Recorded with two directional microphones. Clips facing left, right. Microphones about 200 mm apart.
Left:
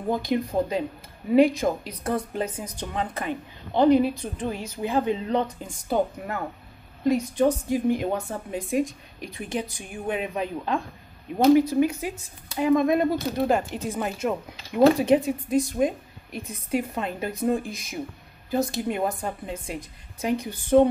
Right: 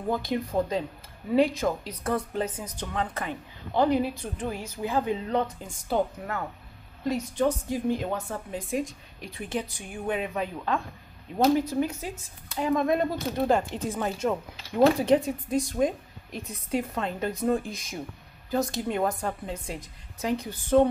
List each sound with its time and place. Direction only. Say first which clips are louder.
0.1 s speech: left 3 dB; 15° left (ahead or behind)
7.1 s speech: left 5 dB; 15° left (ahead or behind)